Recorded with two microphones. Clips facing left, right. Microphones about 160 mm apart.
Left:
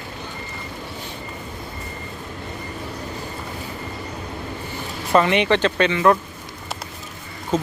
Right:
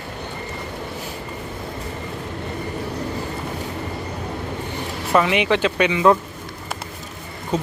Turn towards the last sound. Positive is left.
turn(degrees=-10)  # may be behind; listen again after turning